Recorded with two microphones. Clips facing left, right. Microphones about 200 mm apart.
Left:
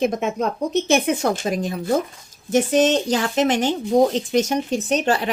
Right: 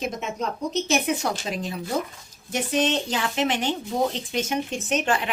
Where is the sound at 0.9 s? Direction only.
50° left (ahead or behind).